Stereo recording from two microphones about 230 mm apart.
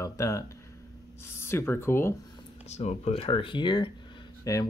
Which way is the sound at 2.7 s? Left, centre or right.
Left.